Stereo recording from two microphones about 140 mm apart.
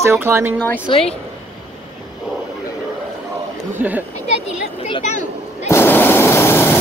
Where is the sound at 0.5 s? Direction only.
15° left (ahead or behind).